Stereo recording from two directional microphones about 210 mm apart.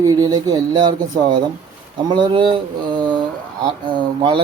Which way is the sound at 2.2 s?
25° right (ahead or behind).